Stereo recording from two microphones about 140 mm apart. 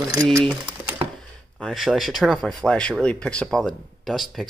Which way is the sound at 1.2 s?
5° left (ahead or behind).